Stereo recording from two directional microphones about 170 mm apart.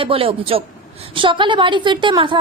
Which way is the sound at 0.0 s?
35° right (ahead or behind).